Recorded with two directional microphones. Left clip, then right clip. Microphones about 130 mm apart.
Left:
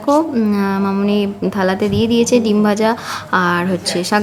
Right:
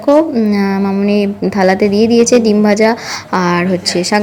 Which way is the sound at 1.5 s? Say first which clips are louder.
Right 7 dB; 25° right (ahead or behind).